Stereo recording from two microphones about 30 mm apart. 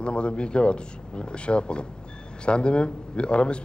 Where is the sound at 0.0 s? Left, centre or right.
Left.